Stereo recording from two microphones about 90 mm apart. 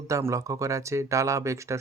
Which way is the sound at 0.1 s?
35° right (ahead or behind).